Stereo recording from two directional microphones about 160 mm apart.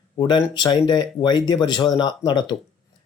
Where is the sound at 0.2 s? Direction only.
30° left (ahead or behind).